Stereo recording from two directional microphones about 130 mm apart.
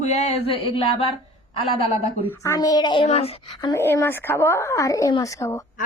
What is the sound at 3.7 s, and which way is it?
Speech, 20° left (ahead or behind).